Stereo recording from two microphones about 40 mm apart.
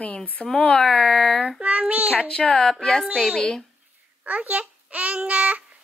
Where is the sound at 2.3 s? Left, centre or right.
Left.